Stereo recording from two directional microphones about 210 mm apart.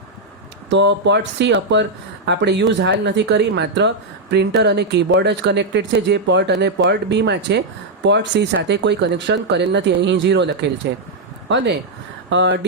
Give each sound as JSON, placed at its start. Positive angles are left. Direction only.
{"t": 0.7, "sound": "speech", "side_deg": -60}